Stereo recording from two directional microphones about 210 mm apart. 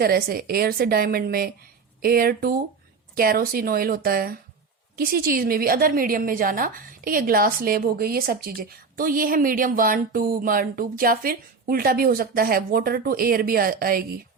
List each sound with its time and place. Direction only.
0.0 s a woman's voice: 45° right (ahead or behind)